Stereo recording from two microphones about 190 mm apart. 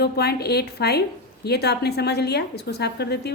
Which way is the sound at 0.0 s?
55° left (ahead or behind).